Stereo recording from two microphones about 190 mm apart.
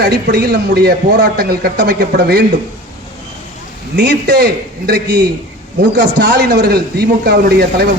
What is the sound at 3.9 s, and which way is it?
Speech, 65° right (ahead or behind).